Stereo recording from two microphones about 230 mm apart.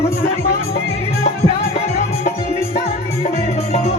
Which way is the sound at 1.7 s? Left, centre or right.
Left.